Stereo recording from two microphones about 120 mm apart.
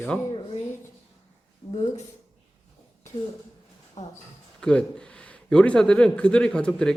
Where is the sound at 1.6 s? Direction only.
50° left (ahead or behind).